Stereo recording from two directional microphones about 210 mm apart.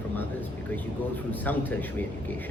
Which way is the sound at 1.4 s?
10° left (ahead or behind).